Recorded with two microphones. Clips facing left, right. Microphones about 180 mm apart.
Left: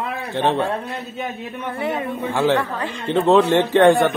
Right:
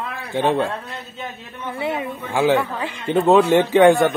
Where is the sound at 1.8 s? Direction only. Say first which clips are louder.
Left 2 dB; 10° right (ahead or behind).